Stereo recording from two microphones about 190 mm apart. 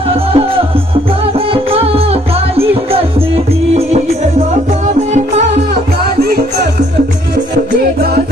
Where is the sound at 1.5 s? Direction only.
30° right (ahead or behind).